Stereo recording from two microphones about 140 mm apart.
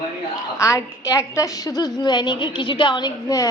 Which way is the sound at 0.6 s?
20° left (ahead or behind).